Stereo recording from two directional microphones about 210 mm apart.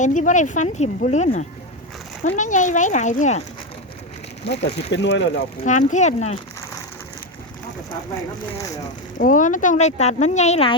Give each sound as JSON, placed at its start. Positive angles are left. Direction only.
{"t": 0.0, "sound": "speech", "side_deg": 35}
{"t": 4.4, "sound": "speech", "side_deg": 55}
{"t": 5.6, "sound": "speech", "side_deg": 35}
{"t": 9.1, "sound": "speech", "side_deg": 40}